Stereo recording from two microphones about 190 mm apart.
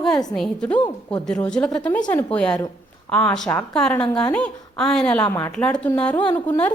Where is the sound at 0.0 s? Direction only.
Centre (ahead or behind).